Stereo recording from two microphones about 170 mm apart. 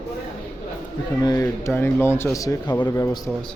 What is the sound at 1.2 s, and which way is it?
Speech, 20° left (ahead or behind).